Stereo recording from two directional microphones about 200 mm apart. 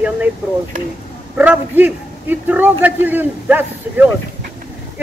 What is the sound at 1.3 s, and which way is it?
A man's voice, 10° right (ahead or behind).